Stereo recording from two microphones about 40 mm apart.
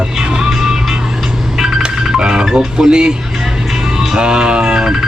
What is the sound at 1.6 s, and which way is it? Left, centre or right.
Speech, right.